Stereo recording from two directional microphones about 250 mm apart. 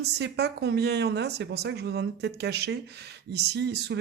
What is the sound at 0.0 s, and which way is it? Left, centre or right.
Speech, right.